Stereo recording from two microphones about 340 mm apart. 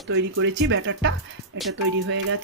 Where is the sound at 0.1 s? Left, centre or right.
Right.